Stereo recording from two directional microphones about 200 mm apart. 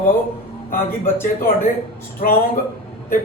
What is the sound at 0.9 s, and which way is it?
Speech, 10° left (ahead or behind).